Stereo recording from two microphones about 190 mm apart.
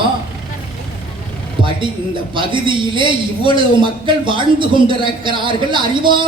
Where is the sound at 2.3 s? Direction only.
25° right (ahead or behind).